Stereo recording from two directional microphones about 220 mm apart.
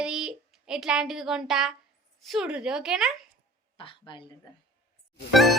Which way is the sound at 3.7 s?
25° left (ahead or behind).